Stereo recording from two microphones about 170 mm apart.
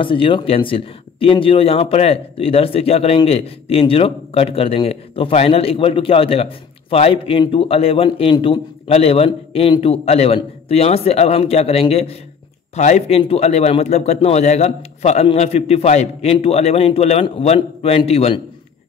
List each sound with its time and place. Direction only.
0.0 s speech: 30° left (ahead or behind)